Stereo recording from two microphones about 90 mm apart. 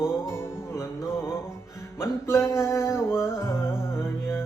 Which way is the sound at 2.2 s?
30° left (ahead or behind).